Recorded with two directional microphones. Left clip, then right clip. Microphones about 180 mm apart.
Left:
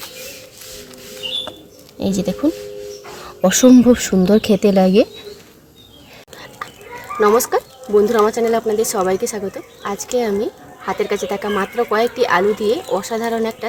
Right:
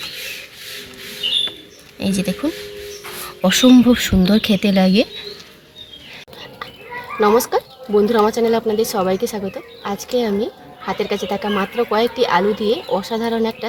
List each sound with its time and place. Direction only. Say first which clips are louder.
2.0 s speech: left 2 dB; 40° left (ahead or behind)
7.2 s speech: left 1 dB; 10° left (ahead or behind)